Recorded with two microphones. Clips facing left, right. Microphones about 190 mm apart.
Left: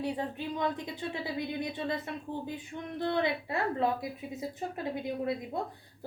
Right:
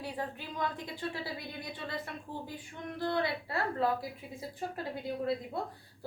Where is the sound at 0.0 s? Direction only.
20° left (ahead or behind).